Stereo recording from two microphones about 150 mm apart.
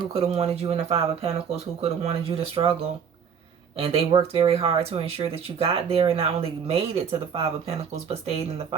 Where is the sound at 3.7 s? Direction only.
40° right (ahead or behind).